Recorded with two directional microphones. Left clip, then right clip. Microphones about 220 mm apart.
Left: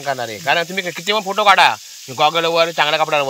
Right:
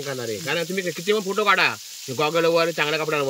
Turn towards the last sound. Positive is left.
turn(degrees=-10)  # may be behind; listen again after turning